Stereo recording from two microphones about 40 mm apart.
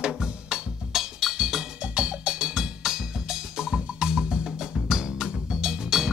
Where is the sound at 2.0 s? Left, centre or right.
Centre.